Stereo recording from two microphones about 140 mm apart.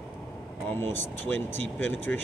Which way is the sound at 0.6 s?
15° left (ahead or behind).